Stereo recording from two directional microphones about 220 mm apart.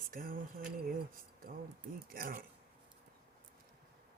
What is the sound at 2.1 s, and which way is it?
Speech, 40° right (ahead or behind).